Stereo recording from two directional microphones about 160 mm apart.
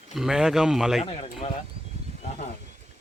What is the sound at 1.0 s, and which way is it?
Speech, 40° left (ahead or behind).